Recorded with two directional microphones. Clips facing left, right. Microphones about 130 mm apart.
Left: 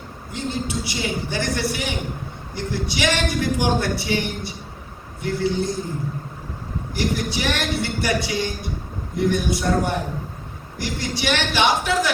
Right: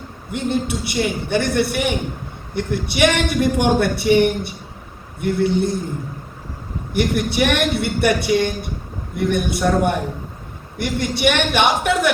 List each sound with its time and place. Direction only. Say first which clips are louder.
0.3 s a man's voice: right 6 dB; 60° right (ahead or behind)
6.9 s a man's voice: right 5 dB; 60° right (ahead or behind)